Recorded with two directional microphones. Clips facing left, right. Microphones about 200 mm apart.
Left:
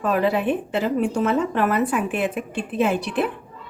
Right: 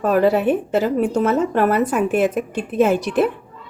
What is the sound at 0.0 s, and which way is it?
A woman's voice, 45° right (ahead or behind).